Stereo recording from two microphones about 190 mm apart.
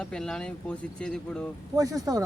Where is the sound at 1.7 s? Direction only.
20° right (ahead or behind).